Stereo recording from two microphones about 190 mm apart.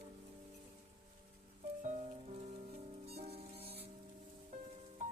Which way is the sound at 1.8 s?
40° right (ahead or behind).